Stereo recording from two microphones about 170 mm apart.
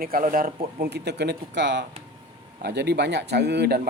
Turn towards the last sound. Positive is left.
turn(degrees=-70)  # may be behind; listen again after turning